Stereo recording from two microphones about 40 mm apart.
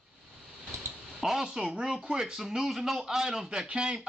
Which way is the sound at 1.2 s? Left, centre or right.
Centre.